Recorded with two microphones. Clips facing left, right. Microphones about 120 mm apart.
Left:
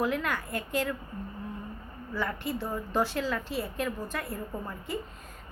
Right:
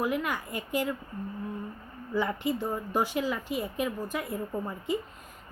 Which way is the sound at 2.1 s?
20° right (ahead or behind).